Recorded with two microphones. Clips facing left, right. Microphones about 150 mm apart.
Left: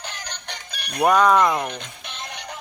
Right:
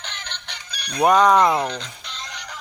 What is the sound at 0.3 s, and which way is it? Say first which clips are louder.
Music: left 2 dB; 45° left (ahead or behind).